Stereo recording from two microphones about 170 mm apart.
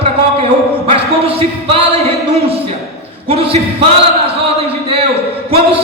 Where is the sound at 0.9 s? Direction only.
35° right (ahead or behind).